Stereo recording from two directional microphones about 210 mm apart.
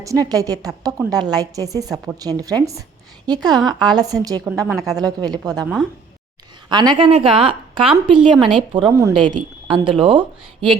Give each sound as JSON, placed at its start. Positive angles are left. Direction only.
{"t": 0.0, "sound": "a woman's voice", "side_deg": -15}
{"t": 6.7, "sound": "a woman's voice", "side_deg": -20}
{"t": 8.9, "sound": "a woman's voice", "side_deg": -15}